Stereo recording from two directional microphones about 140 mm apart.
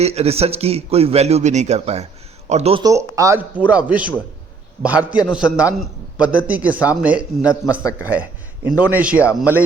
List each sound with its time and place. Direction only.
0.0 s speech: 50° right (ahead or behind)
2.8 s speech: 25° right (ahead or behind)
3.7 s a man's voice: 10° right (ahead or behind)
8.1 s a sound: 10° right (ahead or behind)
8.8 s speech: 10° right (ahead or behind)